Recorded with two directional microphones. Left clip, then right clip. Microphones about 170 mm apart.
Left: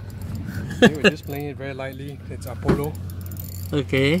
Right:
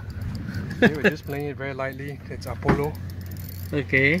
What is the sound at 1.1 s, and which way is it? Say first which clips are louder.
Speech: right 1 dB; 10° right (ahead or behind).